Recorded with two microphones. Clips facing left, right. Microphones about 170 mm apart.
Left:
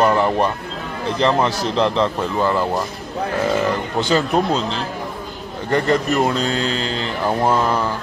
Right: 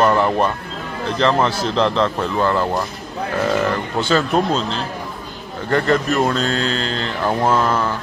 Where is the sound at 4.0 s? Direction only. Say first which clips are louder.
Even; 15° left (ahead or behind).